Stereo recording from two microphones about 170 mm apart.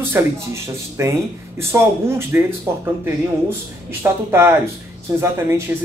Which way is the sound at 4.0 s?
15° right (ahead or behind).